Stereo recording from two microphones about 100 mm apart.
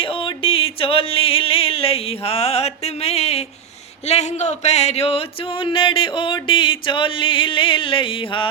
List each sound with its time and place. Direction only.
0.0 s music: 60° left (ahead or behind); by 3.4 s 90° left
4.1 s a man's voice: 90° left
4.6 s a sound: 90° left; by 8.4 s 60° left (ahead or behind)